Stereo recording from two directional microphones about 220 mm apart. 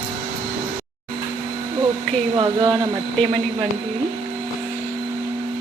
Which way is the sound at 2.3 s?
20° right (ahead or behind).